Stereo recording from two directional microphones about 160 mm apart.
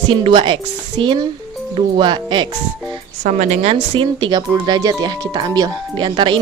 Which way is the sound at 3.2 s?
50° right (ahead or behind).